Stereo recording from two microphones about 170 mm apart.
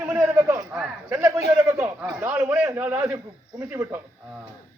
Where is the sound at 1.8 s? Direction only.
10° right (ahead or behind).